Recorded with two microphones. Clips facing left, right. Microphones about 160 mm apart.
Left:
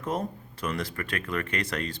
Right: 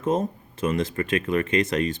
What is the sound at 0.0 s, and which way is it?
Speech, 25° right (ahead or behind).